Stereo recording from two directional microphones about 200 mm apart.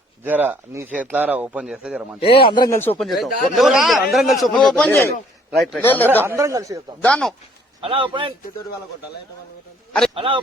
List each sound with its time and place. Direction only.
0.3 s speech: 10° right (ahead or behind)
2.2 s a man's voice: 25° left (ahead or behind); by 6.1 s 10° left (ahead or behind)
6.2 s speech: 15° right (ahead or behind)
7.0 s a man's voice: 5° left (ahead or behind)
7.8 s speech: 25° right (ahead or behind)
10.2 s speech: 25° right (ahead or behind)